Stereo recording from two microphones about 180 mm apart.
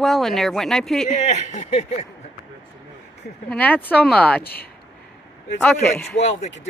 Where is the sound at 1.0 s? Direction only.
40° left (ahead or behind).